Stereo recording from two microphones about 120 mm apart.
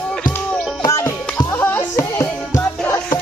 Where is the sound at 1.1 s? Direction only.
15° left (ahead or behind).